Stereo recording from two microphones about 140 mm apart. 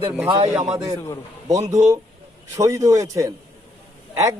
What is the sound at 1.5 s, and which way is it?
A man's voice, 25° right (ahead or behind).